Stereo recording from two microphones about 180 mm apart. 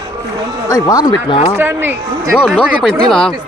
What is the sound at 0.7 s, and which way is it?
Speech, 20° left (ahead or behind).